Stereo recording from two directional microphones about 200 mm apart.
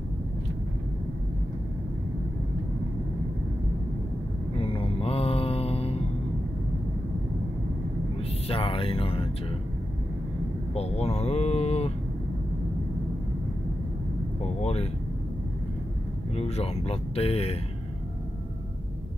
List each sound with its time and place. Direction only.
4.6 s mantra: 25° left (ahead or behind)
8.2 s music: 30° left (ahead or behind)
10.7 s speech: 30° left (ahead or behind)
14.6 s speech: 30° left (ahead or behind)
16.3 s speech: 30° left (ahead or behind)